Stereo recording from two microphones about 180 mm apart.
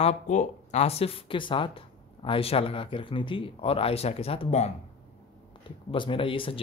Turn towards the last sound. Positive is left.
turn(degrees=30)  # may be behind; listen again after turning